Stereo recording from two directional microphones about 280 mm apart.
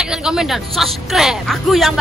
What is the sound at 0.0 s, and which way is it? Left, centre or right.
A woman's voice, centre.